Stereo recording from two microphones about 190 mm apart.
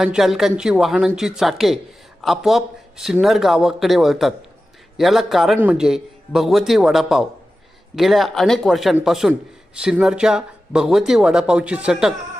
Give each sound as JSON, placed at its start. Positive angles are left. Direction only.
{"t": 0.0, "sound": "speech", "side_deg": 0}